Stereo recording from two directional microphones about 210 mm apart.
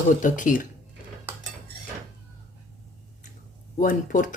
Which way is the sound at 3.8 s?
40° left (ahead or behind).